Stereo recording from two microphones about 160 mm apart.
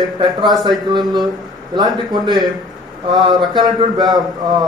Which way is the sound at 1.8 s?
25° right (ahead or behind).